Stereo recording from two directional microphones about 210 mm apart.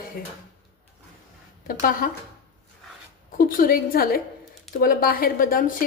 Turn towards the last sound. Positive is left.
turn(degrees=40)  # may be behind; listen again after turning